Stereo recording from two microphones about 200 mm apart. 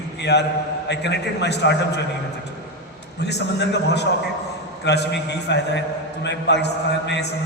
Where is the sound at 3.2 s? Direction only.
60° left (ahead or behind).